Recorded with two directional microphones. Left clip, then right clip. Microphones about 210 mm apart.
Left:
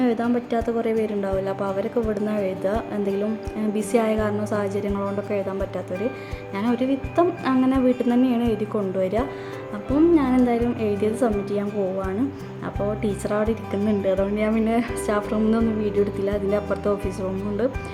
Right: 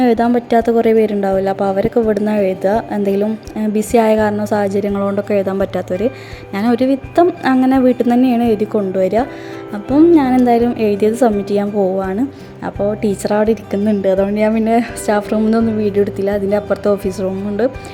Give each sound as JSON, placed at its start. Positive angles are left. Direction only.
{"t": 0.0, "sound": "a woman's voice", "side_deg": -30}